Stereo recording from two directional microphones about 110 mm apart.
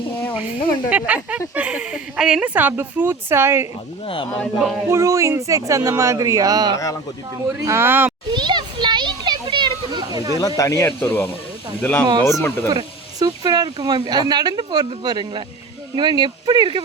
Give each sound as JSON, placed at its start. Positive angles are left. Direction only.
{"t": 0.9, "sound": "speech", "side_deg": -10}
{"t": 4.0, "sound": "speech", "side_deg": 55}
{"t": 4.4, "sound": "speech", "side_deg": 0}
{"t": 4.9, "sound": "speech", "side_deg": -30}
{"t": 8.3, "sound": "children playing", "side_deg": -45}
{"t": 10.6, "sound": "speech", "side_deg": 30}
{"t": 10.8, "sound": "speech", "side_deg": 15}
{"t": 12.6, "sound": "speech", "side_deg": -35}